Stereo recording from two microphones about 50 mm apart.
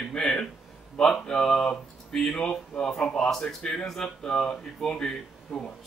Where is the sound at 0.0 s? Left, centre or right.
Centre.